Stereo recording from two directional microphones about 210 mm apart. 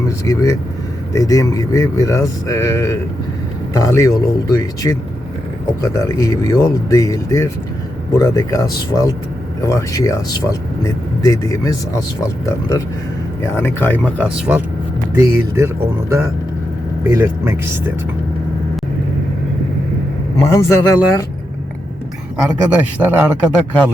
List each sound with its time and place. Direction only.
0.3 s speech: 15° left (ahead or behind)
15.1 s speech: 10° right (ahead or behind)
20.5 s speech: 15° left (ahead or behind)
22.4 s speech: 10° right (ahead or behind)